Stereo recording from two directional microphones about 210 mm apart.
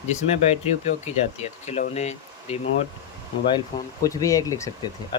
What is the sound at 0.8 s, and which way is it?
Speech, 30° left (ahead or behind).